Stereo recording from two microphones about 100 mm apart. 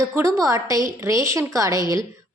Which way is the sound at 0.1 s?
30° right (ahead or behind).